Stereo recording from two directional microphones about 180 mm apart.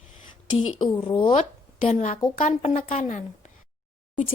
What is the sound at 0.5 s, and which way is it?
A woman's voice, 30° left (ahead or behind).